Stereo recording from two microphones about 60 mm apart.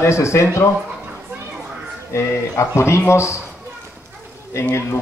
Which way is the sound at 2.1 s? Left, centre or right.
Left.